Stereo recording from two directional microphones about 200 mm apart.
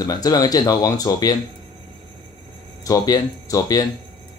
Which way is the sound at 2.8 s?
20° left (ahead or behind).